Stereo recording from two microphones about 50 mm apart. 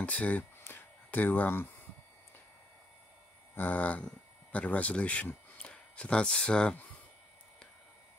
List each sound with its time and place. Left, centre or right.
0.0 s speech: left
0.7 s a sound: left
3.5 s speech: left
5.6 s speech: centre